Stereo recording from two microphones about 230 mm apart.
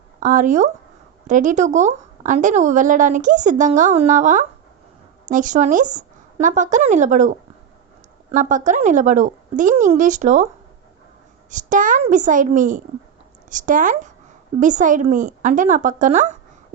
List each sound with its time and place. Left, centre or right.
0.2 s a woman's voice: right
11.5 s a woman's voice: right